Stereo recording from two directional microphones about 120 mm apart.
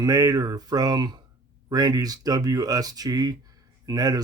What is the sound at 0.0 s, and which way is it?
Speech, 30° right (ahead or behind).